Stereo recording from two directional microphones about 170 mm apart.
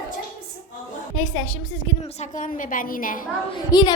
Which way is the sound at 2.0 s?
40° left (ahead or behind).